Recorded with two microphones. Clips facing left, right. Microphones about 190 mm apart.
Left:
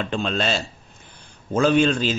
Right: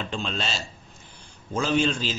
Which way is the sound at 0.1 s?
55° left (ahead or behind).